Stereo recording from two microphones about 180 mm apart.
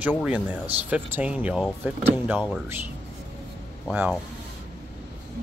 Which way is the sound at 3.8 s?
5° right (ahead or behind).